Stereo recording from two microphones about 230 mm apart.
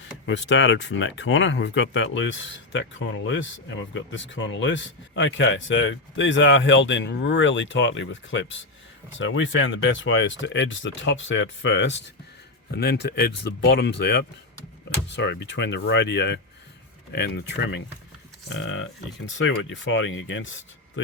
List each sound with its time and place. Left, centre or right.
0.3 s speech: left